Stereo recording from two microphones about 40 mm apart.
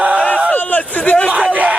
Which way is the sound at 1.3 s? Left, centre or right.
Right.